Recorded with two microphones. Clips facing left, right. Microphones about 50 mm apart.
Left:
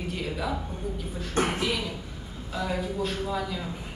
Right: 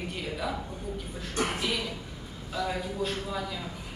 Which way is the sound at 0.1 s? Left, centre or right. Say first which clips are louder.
Left 4 dB; centre.